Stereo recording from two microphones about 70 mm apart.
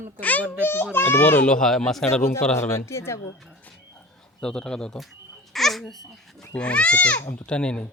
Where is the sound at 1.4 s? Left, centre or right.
Centre.